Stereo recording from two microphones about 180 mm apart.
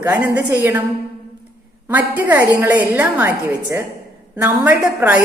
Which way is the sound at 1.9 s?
10° right (ahead or behind).